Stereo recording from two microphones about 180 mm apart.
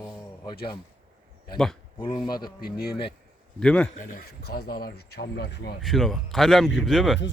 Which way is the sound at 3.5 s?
5° left (ahead or behind).